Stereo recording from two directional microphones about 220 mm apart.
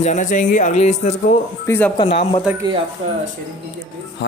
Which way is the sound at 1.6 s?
10° left (ahead or behind).